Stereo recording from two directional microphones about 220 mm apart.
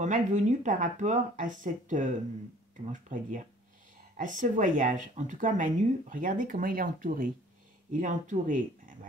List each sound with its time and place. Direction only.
0.0 s speech: 35° right (ahead or behind)